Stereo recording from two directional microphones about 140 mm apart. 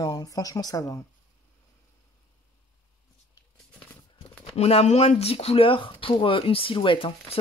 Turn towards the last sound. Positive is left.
turn(degrees=40)  # may be behind; listen again after turning